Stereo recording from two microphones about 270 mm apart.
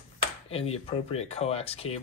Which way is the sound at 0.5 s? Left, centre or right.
Left.